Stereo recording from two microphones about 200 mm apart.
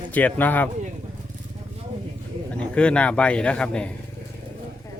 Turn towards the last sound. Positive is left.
turn(degrees=5)  # may be behind; listen again after turning